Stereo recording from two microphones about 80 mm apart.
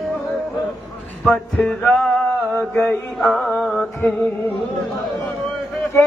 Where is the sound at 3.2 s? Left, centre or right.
Centre.